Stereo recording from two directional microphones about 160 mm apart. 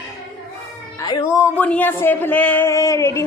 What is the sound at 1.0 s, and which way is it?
Speech, 25° left (ahead or behind).